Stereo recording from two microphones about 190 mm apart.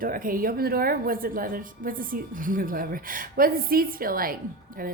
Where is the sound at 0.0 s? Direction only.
50° right (ahead or behind).